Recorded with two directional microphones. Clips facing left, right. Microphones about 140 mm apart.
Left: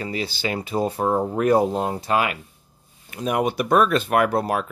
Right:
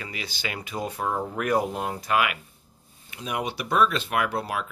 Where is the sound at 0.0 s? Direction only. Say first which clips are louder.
Left 8 dB; 35° left (ahead or behind).